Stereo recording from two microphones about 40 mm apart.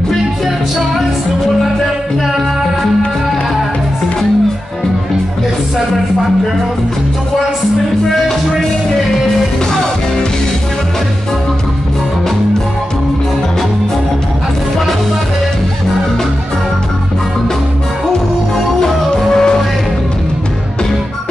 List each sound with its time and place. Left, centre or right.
19.3 s music: centre